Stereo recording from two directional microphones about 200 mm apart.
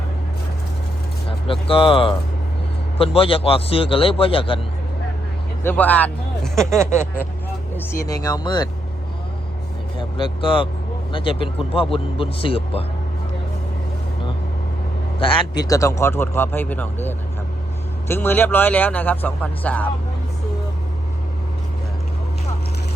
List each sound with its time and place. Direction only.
1.3 s speech: 25° left (ahead or behind)
5.6 s speech: 10° left (ahead or behind)
6.7 s speech: 15° right (ahead or behind)
8.1 s speech: 20° left (ahead or behind)
10.0 s speech: 25° left (ahead or behind)
15.2 s speech: 20° left (ahead or behind)